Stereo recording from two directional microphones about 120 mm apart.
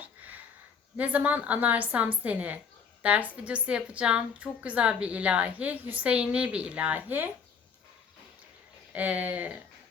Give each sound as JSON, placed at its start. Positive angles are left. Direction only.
{"t": 0.9, "sound": "a woman's voice", "side_deg": -15}
{"t": 8.9, "sound": "a woman's voice", "side_deg": -15}